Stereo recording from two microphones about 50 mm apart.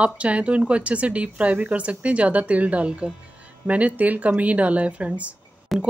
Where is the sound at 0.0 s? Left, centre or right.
Right.